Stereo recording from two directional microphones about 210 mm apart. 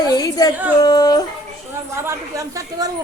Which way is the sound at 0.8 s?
15° left (ahead or behind).